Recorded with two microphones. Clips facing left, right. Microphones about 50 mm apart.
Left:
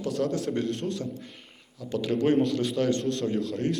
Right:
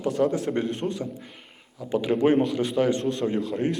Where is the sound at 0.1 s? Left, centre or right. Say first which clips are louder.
Right 4 dB; centre.